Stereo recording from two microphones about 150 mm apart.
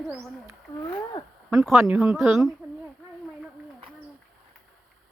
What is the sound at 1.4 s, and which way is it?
A woman's voice, centre (ahead or behind).